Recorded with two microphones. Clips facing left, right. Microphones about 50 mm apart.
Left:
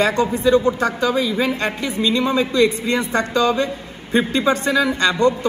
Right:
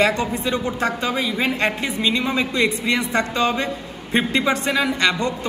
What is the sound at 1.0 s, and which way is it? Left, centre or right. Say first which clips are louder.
A man's voice: left 3 dB; right.